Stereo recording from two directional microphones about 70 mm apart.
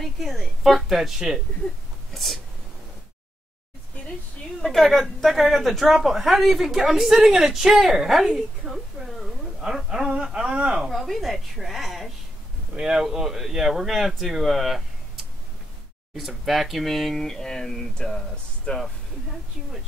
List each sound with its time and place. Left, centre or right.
0.0 s speech: centre
4.6 s speech: centre
10.9 s speech: centre
16.2 s speech: centre